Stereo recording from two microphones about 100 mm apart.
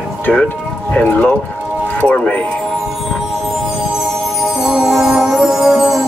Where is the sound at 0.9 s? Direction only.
15° left (ahead or behind).